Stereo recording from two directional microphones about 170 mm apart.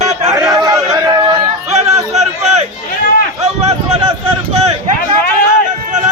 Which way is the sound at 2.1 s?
40° right (ahead or behind).